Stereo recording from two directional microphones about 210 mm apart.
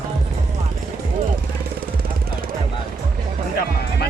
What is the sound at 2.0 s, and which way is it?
Music, 45° right (ahead or behind).